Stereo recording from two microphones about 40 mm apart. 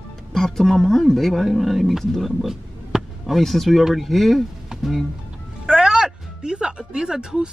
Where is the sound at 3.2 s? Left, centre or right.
Centre.